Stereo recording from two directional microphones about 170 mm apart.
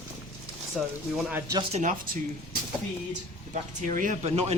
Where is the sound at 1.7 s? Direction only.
45° right (ahead or behind).